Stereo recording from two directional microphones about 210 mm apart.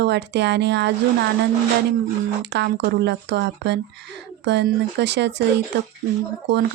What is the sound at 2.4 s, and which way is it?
Speech, 55° right (ahead or behind).